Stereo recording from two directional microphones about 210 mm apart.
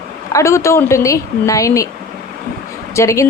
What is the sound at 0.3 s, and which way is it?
A woman's voice, 15° left (ahead or behind).